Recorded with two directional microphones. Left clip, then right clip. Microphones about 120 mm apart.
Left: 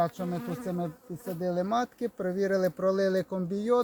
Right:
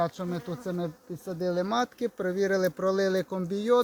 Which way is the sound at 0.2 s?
35° right (ahead or behind).